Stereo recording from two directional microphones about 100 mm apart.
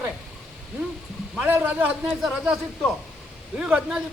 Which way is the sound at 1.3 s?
15° right (ahead or behind).